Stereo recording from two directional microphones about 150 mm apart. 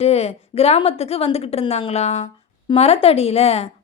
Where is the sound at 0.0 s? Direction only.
45° left (ahead or behind).